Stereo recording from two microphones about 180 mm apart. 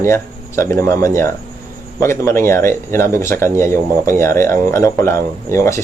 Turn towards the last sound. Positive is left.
turn(degrees=15)  # may be behind; listen again after turning